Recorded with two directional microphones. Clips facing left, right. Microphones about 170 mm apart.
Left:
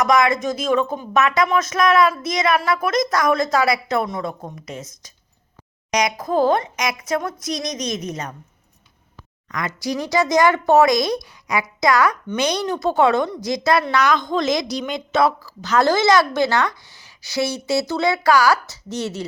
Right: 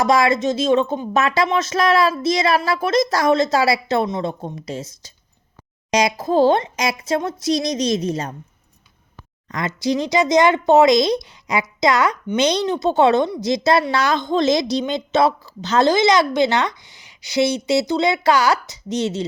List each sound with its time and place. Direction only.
0.0 s a woman's voice: 30° right (ahead or behind)
9.5 s a woman's voice: 25° right (ahead or behind)